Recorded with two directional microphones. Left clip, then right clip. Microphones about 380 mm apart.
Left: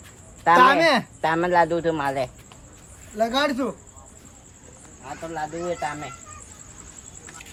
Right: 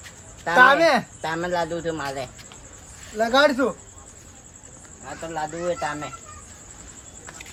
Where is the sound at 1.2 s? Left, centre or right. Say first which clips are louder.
Left 6 dB; left.